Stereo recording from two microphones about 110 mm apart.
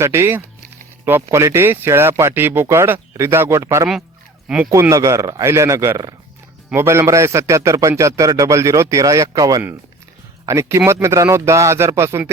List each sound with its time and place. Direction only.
0.0 s a man's voice: 25° right (ahead or behind)
4.4 s speech: 10° right (ahead or behind)
4.7 s a man's voice: 30° right (ahead or behind)